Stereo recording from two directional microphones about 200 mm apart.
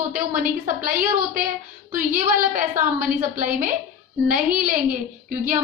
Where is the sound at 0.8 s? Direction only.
45° right (ahead or behind).